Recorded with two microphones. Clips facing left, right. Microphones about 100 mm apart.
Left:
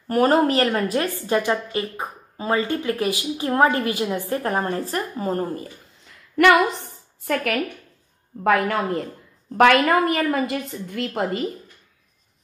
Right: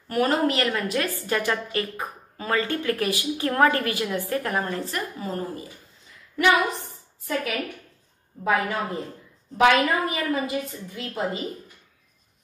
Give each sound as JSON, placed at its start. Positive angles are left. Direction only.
{"t": 0.1, "sound": "speech", "side_deg": 40}
{"t": 6.3, "sound": "a woman's voice", "side_deg": 65}
{"t": 8.5, "sound": "a woman's voice", "side_deg": 65}